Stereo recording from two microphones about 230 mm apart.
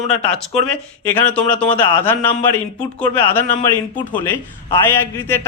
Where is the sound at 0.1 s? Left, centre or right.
Centre.